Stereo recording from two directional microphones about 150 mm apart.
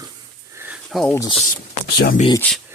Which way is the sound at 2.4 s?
10° left (ahead or behind).